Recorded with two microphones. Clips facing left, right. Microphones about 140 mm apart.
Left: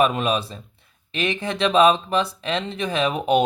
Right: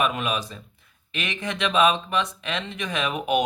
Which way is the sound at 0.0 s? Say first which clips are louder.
Left 5 dB; 30° left (ahead or behind).